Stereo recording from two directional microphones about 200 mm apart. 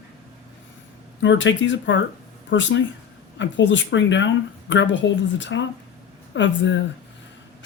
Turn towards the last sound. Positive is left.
turn(degrees=65)  # may be behind; listen again after turning